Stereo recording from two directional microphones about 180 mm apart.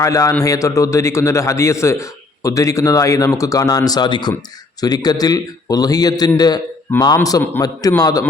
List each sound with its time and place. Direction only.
0.0 s a man's voice: 15° left (ahead or behind)